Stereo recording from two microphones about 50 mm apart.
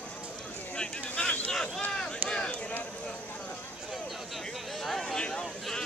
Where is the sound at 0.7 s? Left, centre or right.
Centre.